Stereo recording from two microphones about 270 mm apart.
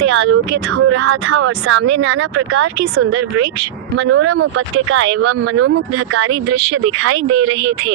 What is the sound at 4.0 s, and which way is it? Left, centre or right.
Speech, right.